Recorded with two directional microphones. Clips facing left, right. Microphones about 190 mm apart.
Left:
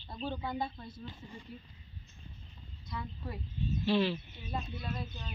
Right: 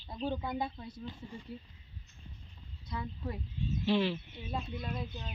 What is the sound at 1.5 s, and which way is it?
Speech, 30° right (ahead or behind).